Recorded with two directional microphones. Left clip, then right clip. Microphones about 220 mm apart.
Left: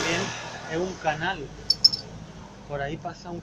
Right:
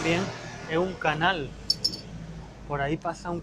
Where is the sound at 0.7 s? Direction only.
25° right (ahead or behind).